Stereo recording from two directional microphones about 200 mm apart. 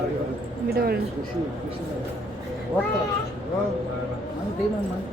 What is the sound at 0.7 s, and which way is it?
Speech, 50° right (ahead or behind).